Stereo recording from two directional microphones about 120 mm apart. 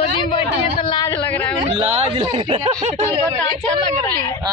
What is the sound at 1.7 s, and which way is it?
Speech, 50° right (ahead or behind).